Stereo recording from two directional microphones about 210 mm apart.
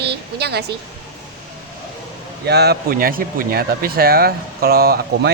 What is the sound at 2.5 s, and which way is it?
A woman's voice, 50° right (ahead or behind).